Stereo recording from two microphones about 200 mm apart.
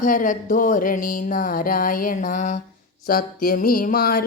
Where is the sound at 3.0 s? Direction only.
45° left (ahead or behind).